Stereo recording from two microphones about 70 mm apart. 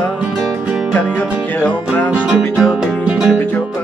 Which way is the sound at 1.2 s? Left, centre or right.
Left.